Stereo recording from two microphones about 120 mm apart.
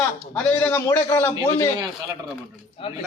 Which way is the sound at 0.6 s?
15° left (ahead or behind).